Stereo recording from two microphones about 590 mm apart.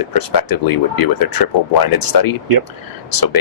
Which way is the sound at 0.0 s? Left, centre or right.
Left.